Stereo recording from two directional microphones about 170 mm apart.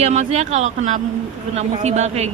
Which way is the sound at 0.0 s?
40° right (ahead or behind).